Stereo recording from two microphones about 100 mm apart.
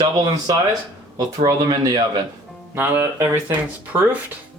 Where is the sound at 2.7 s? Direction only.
25° right (ahead or behind).